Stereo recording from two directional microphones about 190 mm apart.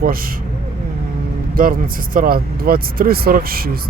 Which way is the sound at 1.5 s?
50° right (ahead or behind).